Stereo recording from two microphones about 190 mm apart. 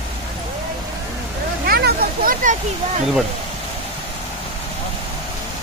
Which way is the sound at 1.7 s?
55° right (ahead or behind).